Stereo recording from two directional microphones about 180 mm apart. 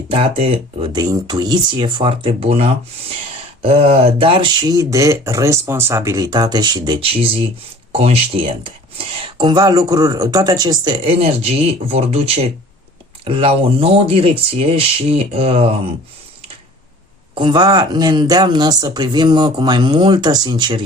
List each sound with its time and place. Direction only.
0.1 s speech: 30° right (ahead or behind)
17.3 s speech: 25° right (ahead or behind)